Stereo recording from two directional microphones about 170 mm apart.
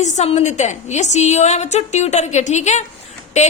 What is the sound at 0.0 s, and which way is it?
A woman's voice, 40° left (ahead or behind).